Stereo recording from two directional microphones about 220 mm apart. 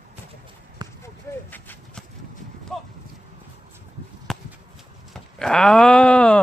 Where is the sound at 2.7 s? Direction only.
Centre (ahead or behind).